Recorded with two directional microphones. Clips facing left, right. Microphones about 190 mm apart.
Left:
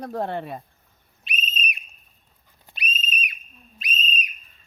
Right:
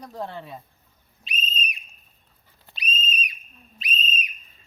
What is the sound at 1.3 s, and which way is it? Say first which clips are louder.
Whistle: left 1 dB; 60° left (ahead or behind).